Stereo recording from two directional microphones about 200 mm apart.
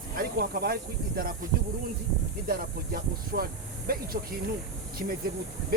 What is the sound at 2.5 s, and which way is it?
Speech, 50° right (ahead or behind).